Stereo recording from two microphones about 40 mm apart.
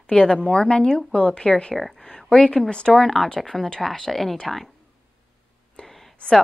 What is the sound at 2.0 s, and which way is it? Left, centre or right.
Speech, centre.